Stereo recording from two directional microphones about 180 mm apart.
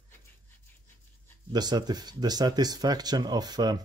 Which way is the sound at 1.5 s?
20° right (ahead or behind).